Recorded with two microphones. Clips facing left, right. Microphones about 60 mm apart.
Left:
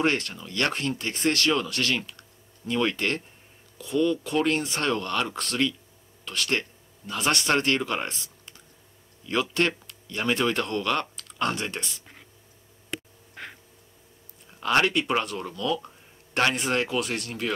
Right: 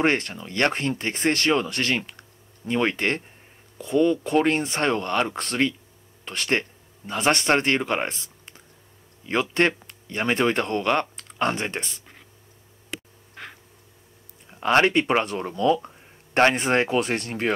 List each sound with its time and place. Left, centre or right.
0.0 s speech: right
13.3 s a sound: centre
14.5 s speech: right